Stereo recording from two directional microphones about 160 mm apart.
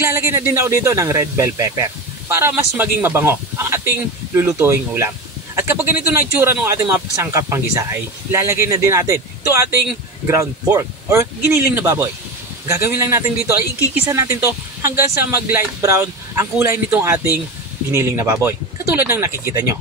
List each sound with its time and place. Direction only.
0.0 s speech: 15° right (ahead or behind)